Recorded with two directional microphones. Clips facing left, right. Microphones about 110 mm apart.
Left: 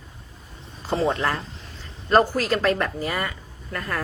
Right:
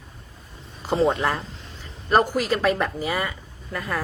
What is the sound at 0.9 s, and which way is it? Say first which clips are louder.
A woman's voice: right 2 dB; 15° right (ahead or behind).